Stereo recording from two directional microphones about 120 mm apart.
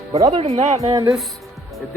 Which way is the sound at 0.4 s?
70° right (ahead or behind).